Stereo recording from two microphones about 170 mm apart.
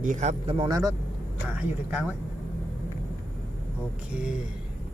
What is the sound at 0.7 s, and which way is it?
Speech, 20° right (ahead or behind).